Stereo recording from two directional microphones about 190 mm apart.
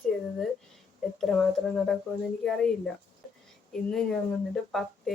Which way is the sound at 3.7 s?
Centre (ahead or behind).